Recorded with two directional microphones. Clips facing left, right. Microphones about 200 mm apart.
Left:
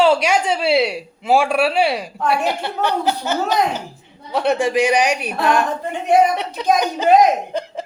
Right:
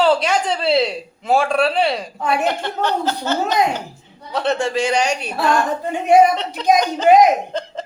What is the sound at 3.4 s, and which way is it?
Speech, 15° right (ahead or behind).